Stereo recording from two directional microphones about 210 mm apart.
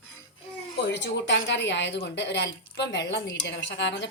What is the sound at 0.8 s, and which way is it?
A woman's voice, 55° left (ahead or behind).